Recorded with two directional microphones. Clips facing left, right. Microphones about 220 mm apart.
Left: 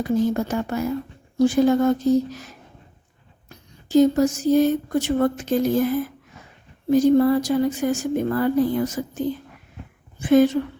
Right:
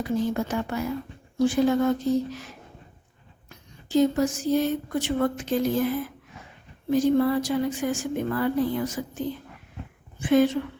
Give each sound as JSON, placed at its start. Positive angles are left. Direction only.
{"t": 0.2, "sound": "speech", "side_deg": 40}
{"t": 3.5, "sound": "speech", "side_deg": 40}